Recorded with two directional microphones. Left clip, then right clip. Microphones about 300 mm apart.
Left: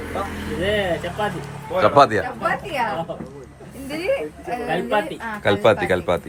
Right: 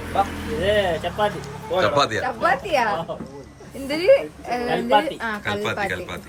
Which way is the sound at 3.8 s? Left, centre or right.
Right.